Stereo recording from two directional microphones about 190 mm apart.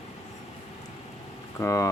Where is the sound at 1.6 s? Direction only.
15° left (ahead or behind).